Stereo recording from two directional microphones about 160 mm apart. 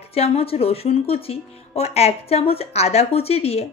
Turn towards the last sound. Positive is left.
turn(degrees=40)  # may be behind; listen again after turning